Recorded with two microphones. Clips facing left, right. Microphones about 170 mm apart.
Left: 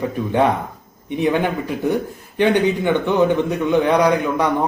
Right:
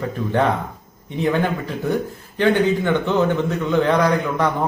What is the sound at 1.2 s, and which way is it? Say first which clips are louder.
A man's voice: left 1 dB; 15° left (ahead or behind).